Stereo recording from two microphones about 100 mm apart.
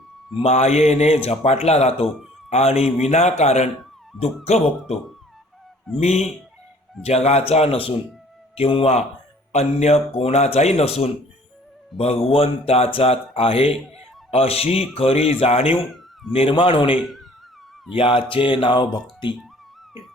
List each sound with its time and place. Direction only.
0.4 s a man's voice: 90° left
4.1 s speech: centre (ahead or behind)
5.9 s speech: centre (ahead or behind)
7.0 s speech: 90° left
16.3 s speech: 65° left (ahead or behind)